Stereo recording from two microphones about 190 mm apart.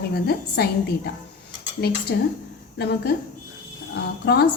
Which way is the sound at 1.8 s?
55° left (ahead or behind).